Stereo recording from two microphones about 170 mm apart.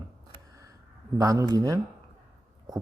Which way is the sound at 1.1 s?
20° right (ahead or behind).